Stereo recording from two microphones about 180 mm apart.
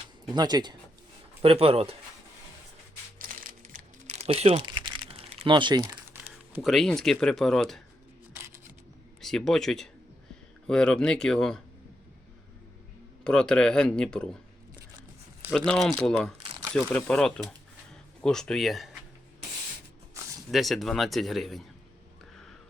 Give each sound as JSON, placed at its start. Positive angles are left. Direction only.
{"t": 0.3, "sound": "speech", "side_deg": -25}
{"t": 3.2, "sound": "crumpling", "side_deg": -50}
{"t": 6.1, "sound": "speech", "side_deg": -5}
{"t": 8.3, "sound": "camera", "side_deg": -15}
{"t": 9.2, "sound": "speech", "side_deg": 0}
{"t": 13.2, "sound": "speech", "side_deg": 5}
{"t": 15.4, "sound": "speech", "side_deg": 5}
{"t": 16.4, "sound": "crumpling", "side_deg": -25}
{"t": 16.7, "sound": "speech", "side_deg": 5}
{"t": 20.5, "sound": "speech", "side_deg": 0}